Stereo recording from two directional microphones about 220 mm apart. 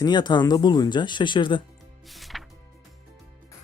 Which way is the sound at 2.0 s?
Centre (ahead or behind).